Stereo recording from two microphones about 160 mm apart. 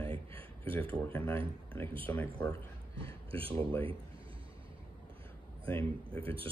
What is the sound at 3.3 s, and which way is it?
Speech, 35° right (ahead or behind).